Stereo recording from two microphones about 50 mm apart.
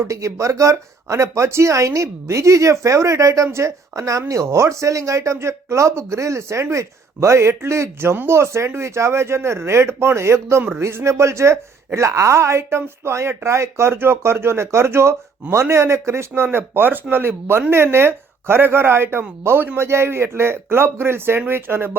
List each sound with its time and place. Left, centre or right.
0.1 s speech: right